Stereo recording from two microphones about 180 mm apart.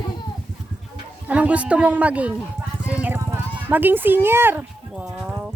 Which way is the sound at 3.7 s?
10° right (ahead or behind).